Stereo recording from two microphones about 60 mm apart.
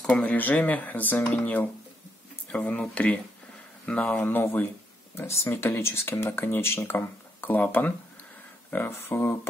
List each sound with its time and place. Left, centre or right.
0.0 s speech: left
4.2 s speech: left
5.1 s speech: left
7.5 s speech: left
8.6 s a sound: left
8.9 s speech: left